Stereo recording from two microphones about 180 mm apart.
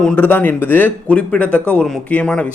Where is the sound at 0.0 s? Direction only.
5° left (ahead or behind).